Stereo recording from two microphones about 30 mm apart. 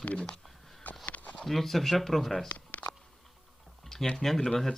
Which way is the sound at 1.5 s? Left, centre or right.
Centre.